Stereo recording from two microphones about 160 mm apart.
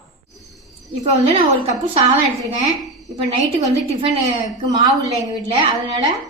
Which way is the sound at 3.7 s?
40° right (ahead or behind).